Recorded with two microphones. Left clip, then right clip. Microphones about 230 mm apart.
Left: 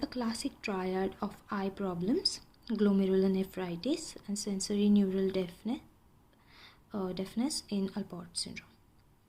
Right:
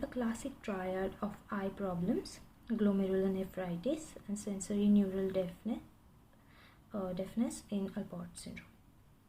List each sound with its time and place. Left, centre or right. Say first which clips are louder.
0.0 s speech: left 3 dB; left